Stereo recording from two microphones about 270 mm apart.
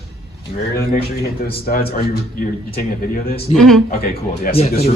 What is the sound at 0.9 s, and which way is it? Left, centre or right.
Speech, left.